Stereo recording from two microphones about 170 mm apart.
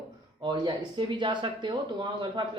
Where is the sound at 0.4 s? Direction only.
25° right (ahead or behind).